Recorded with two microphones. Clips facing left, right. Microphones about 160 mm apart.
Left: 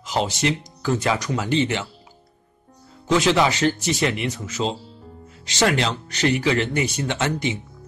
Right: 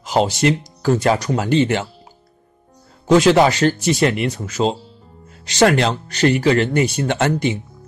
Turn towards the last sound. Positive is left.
turn(degrees=-50)  # may be behind; listen again after turning